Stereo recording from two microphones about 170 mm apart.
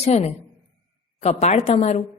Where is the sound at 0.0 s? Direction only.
40° left (ahead or behind).